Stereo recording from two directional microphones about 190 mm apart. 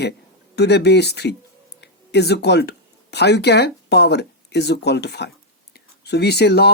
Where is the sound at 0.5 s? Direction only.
60° left (ahead or behind).